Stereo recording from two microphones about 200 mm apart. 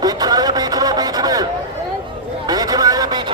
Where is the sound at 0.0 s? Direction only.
20° right (ahead or behind).